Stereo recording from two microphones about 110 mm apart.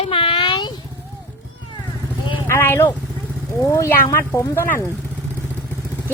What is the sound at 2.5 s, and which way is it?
Speech, 20° left (ahead or behind).